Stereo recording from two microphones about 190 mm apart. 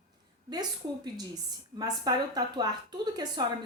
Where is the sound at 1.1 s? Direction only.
20° right (ahead or behind).